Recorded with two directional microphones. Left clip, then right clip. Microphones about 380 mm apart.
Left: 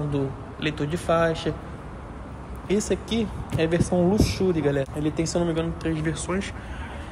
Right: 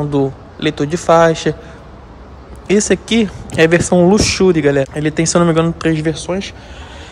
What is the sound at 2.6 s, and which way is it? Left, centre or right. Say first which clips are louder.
Speech: right 12 dB; centre.